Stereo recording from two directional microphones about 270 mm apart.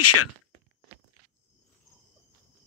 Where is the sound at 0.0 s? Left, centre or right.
Left.